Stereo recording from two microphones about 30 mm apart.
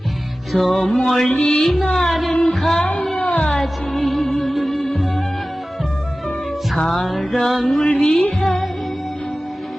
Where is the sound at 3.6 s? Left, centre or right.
Centre.